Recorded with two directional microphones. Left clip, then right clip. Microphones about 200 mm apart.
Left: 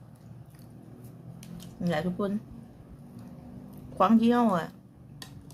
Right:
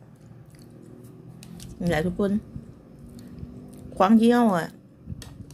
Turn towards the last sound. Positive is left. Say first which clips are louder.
# right 4 dB
turn(degrees=-25)  # may be behind; listen again after turning